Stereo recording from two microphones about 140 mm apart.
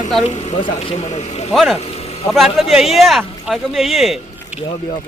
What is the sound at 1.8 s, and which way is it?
Vehicle, 45° left (ahead or behind).